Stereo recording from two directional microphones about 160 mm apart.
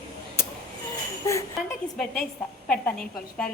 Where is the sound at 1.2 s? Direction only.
20° left (ahead or behind).